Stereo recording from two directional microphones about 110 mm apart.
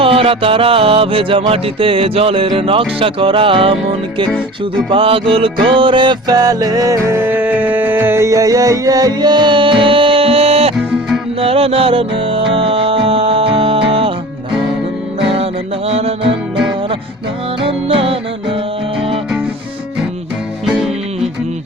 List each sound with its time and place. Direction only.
0.0 s music: 60° right (ahead or behind)
4.3 s music: 5° left (ahead or behind)
4.9 s music: 55° right (ahead or behind)
15.9 s music: 65° right (ahead or behind)
17.6 s music: 55° right (ahead or behind)
20.7 s music: 5° right (ahead or behind)